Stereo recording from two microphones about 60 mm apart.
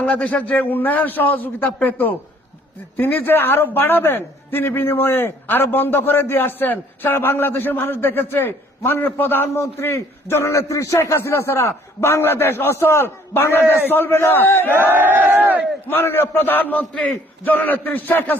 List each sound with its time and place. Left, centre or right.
0.0 s a man's voice: left
14.8 s speech: right
15.9 s a man's voice: left
16.9 s a man's voice: centre
17.4 s a man's voice: left